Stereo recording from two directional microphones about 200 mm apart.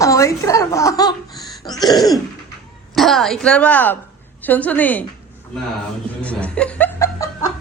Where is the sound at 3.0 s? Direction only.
Centre (ahead or behind).